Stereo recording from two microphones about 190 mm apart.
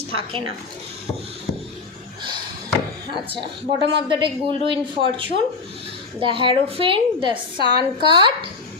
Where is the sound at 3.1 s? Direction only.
25° right (ahead or behind).